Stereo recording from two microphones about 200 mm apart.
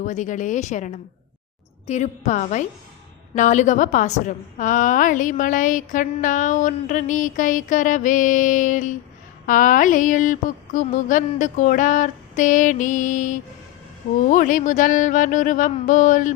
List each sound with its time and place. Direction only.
0.0 s a woman's voice: 40° left (ahead or behind)